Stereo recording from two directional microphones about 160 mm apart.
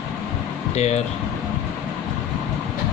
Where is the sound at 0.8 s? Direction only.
45° left (ahead or behind).